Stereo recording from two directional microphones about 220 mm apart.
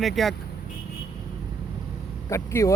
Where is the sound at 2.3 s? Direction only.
15° left (ahead or behind).